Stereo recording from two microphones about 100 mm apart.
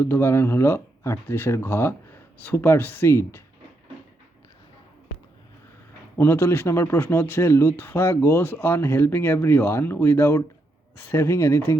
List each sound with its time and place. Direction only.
0.0 s speech: 20° left (ahead or behind)
6.1 s speech: 20° left (ahead or behind)